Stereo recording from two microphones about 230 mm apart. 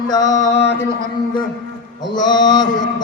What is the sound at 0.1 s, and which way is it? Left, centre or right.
Mantra, centre.